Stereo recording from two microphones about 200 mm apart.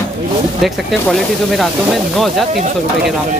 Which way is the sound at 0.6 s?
Centre (ahead or behind).